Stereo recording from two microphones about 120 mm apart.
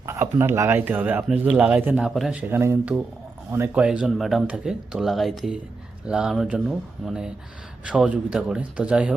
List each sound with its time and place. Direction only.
0.0 s speech: 25° right (ahead or behind); by 2.4 s centre (ahead or behind)
2.4 s speech: 20° right (ahead or behind)
3.8 s speech: 5° right (ahead or behind)